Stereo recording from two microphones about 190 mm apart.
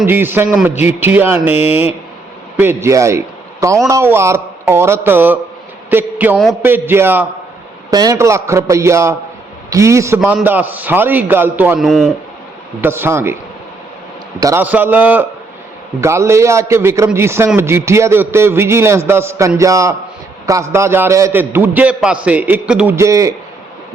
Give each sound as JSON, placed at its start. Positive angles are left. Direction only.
{"t": 0.0, "sound": "a man's voice", "side_deg": -10}
{"t": 12.8, "sound": "a man's voice", "side_deg": -10}